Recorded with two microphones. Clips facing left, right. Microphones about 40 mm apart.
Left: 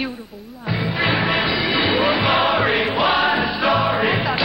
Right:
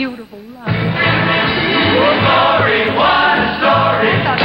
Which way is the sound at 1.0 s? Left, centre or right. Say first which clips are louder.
Right 5 dB; right.